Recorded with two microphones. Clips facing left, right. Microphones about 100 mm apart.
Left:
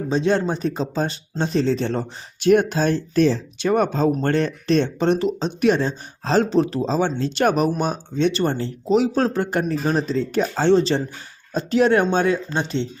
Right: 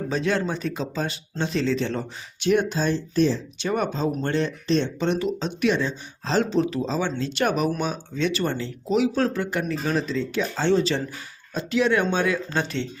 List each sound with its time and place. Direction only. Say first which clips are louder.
0.1 s speech: left 5 dB; 30° left (ahead or behind)
8.1 s speech: left 5 dB; 30° left (ahead or behind)
12.5 s speech: left 3 dB; 25° left (ahead or behind)